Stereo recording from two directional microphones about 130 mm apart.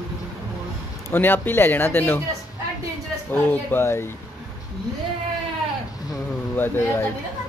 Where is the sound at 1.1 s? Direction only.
15° left (ahead or behind).